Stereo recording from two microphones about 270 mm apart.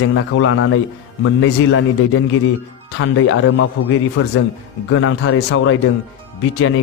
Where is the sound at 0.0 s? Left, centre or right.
Left.